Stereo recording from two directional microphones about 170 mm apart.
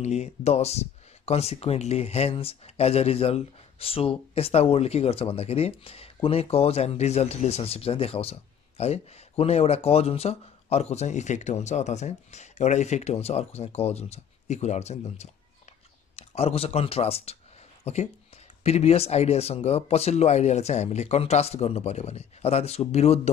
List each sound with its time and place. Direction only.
0.0 s speech: 40° left (ahead or behind)